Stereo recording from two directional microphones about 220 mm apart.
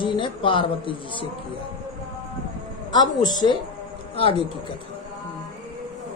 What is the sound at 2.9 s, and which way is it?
Speech, 20° left (ahead or behind).